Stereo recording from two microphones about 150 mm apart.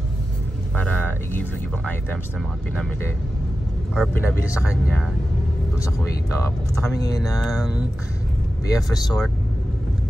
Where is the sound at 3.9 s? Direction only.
5° right (ahead or behind).